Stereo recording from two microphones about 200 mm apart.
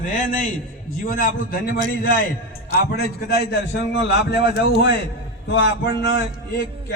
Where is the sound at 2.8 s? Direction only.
50° left (ahead or behind).